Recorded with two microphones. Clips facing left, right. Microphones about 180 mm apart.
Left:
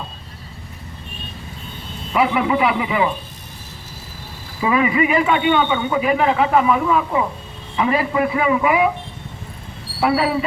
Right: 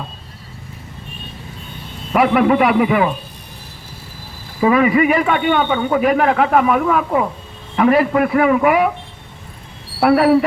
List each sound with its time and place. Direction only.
2.1 s a man's voice: 55° right (ahead or behind)
4.6 s a man's voice: 45° right (ahead or behind)
10.0 s a man's voice: 60° right (ahead or behind)